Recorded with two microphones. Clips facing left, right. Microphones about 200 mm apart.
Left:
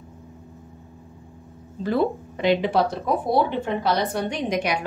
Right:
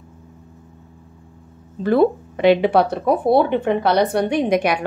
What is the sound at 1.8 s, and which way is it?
Speech, 60° right (ahead or behind).